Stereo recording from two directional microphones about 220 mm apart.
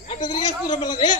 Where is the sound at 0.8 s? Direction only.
20° left (ahead or behind).